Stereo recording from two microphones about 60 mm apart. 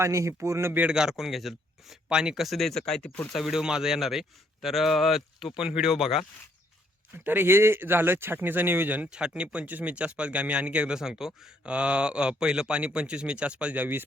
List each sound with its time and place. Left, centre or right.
0.0 s speech: right
0.9 s a man's voice: centre
3.0 s speech: left
3.3 s a man's voice: centre
5.5 s speech: centre
7.3 s speech: right
9.0 s speech: centre